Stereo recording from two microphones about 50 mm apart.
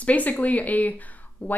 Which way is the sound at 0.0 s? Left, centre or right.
Left.